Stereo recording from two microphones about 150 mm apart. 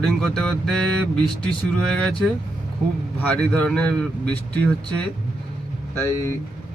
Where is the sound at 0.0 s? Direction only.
5° left (ahead or behind).